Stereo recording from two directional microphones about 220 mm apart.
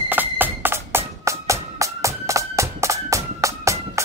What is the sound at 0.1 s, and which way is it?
Music, 10° right (ahead or behind).